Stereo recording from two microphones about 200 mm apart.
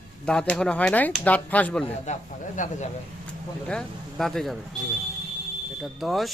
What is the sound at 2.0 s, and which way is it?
Speech, 40° left (ahead or behind).